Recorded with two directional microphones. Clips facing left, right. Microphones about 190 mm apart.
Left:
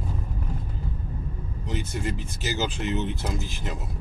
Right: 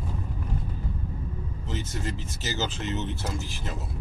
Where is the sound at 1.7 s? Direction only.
15° left (ahead or behind).